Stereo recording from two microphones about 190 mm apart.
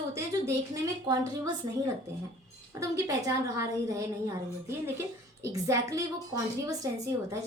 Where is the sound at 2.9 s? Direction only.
15° right (ahead or behind).